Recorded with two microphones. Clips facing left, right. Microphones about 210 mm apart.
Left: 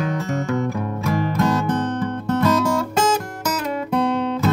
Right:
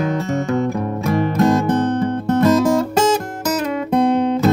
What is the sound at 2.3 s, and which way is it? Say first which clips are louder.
Music: right 5 dB; 40° right (ahead or behind).